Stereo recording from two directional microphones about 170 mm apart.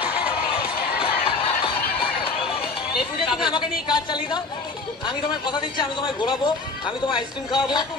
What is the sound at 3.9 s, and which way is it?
A woman's voice, 25° left (ahead or behind).